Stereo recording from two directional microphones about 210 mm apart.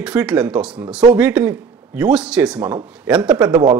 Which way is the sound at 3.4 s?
20° right (ahead or behind).